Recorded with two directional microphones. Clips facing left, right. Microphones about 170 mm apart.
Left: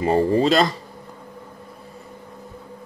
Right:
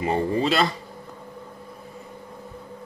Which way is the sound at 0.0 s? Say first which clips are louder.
Left 5 dB; 35° left (ahead or behind).